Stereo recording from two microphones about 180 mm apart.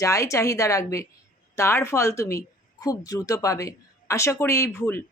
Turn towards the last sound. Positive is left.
turn(degrees=15)  # may be behind; listen again after turning